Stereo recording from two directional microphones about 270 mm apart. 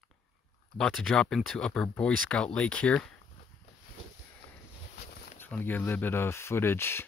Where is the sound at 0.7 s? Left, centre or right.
Centre.